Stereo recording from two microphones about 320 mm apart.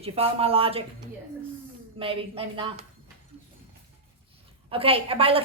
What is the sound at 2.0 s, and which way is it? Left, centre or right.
Speech, centre.